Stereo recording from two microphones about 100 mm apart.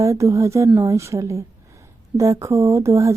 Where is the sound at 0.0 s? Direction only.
30° right (ahead or behind).